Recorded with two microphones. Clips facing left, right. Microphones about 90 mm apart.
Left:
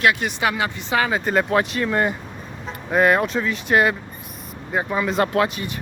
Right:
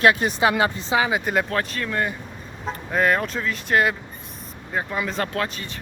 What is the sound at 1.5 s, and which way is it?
Speech, 15° left (ahead or behind).